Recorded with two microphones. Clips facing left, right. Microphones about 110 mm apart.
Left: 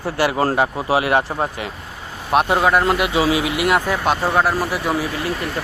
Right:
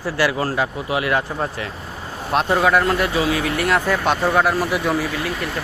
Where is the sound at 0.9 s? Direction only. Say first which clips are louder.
Left 3 dB; 25° left (ahead or behind).